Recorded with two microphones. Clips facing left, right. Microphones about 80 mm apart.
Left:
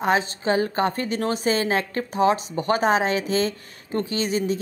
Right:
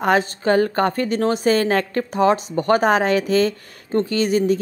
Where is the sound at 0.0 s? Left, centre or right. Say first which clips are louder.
Right 4 dB; right.